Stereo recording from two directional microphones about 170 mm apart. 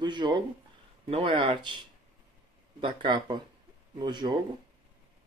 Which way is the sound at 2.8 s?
30° right (ahead or behind).